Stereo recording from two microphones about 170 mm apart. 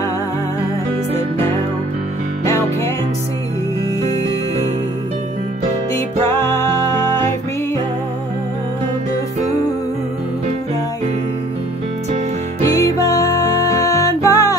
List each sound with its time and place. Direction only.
12.6 s music: 20° left (ahead or behind)